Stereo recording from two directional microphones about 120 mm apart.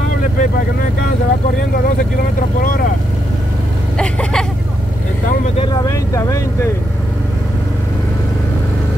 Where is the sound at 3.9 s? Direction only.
5° left (ahead or behind).